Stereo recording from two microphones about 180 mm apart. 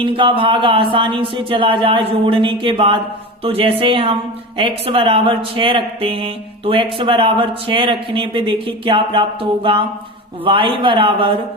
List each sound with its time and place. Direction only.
0.0 s a woman's voice: 30° right (ahead or behind)